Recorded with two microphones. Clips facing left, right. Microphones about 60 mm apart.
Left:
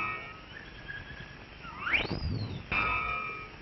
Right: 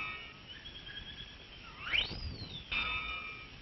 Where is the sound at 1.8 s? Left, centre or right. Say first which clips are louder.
Left 6 dB; left.